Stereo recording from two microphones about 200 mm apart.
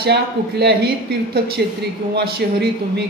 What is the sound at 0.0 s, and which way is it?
Speech, 55° right (ahead or behind).